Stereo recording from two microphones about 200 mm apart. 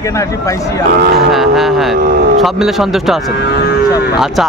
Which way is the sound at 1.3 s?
Centre (ahead or behind).